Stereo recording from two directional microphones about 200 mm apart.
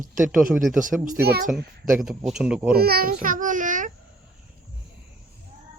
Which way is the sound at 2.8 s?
50° right (ahead or behind).